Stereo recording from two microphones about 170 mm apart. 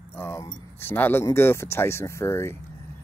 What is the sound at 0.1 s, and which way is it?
Speech, 15° left (ahead or behind).